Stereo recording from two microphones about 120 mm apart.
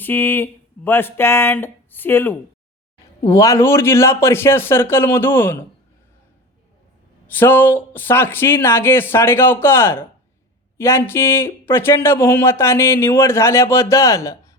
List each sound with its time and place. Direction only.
0.0 s speech: 15° left (ahead or behind)
7.3 s speech: 15° left (ahead or behind)